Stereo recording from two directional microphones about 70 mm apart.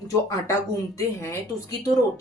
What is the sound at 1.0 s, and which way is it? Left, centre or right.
Speech, left.